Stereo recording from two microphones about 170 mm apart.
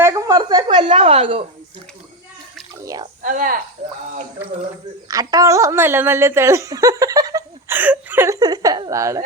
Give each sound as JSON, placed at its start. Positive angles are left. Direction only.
{"t": 0.0, "sound": "a sound", "side_deg": -20}
{"t": 0.9, "sound": "speech", "side_deg": -35}
{"t": 2.7, "sound": "drip", "side_deg": -20}
{"t": 3.2, "sound": "speech", "side_deg": -55}
{"t": 5.0, "sound": "speech", "side_deg": -20}